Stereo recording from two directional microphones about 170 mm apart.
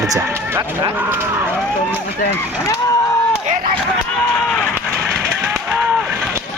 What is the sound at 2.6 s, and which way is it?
Vehicle, 20° left (ahead or behind).